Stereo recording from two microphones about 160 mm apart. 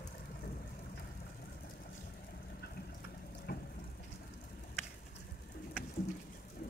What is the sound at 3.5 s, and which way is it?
Water tap, 90° left.